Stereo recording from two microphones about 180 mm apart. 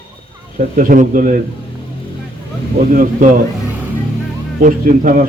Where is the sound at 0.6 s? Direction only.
50° right (ahead or behind).